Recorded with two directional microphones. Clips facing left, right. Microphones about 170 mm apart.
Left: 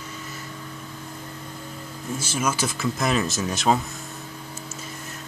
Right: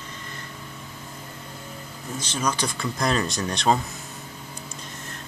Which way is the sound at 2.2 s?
5° left (ahead or behind).